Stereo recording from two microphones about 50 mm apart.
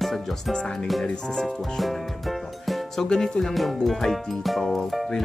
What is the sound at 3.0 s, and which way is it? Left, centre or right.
Speech, centre.